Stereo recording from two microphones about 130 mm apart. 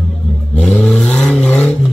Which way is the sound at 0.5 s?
10° left (ahead or behind).